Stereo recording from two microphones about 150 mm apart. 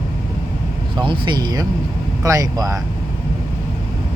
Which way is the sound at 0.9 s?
30° right (ahead or behind).